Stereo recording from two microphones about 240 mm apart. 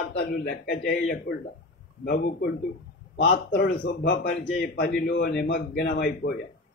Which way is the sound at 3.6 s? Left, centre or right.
Left.